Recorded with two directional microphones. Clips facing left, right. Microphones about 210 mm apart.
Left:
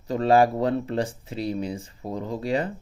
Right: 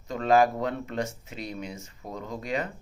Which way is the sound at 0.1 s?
35° left (ahead or behind).